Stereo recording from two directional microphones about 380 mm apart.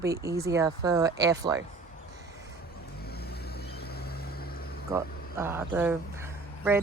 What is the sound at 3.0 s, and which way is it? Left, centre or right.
Vehicle, left.